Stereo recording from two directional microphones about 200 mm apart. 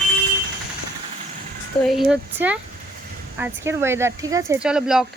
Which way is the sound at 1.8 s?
Centre (ahead or behind).